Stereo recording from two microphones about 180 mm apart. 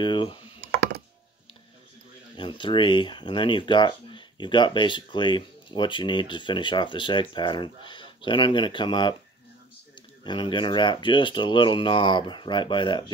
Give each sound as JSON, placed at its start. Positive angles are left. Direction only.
{"t": 0.0, "sound": "speech", "side_deg": 25}
{"t": 2.3, "sound": "speech", "side_deg": 25}
{"t": 10.2, "sound": "speech", "side_deg": 25}